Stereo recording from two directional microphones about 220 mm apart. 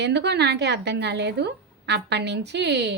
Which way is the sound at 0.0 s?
50° right (ahead or behind).